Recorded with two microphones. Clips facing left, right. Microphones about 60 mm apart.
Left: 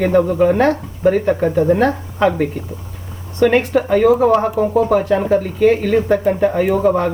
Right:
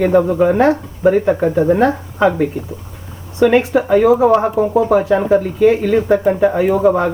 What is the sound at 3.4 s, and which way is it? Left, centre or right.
Speech, centre.